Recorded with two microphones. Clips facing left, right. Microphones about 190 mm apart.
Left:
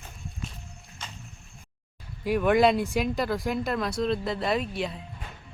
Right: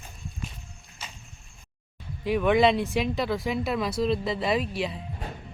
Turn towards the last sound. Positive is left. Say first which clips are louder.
# right 1 dB
turn(degrees=0)  # may be behind; listen again after turning